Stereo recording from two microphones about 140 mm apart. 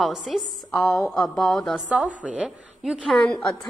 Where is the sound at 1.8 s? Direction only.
10° right (ahead or behind).